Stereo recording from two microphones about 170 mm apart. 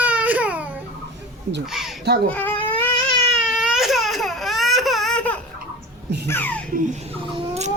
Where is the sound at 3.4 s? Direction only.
5° right (ahead or behind).